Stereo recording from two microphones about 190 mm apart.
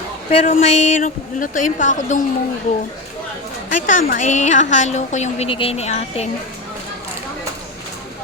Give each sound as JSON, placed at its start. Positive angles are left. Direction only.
{"t": 0.3, "sound": "a woman's voice", "side_deg": 40}
{"t": 3.7, "sound": "a woman's voice", "side_deg": 45}